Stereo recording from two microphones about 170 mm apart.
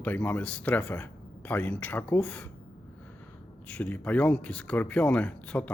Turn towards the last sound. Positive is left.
turn(degrees=10)  # may be behind; listen again after turning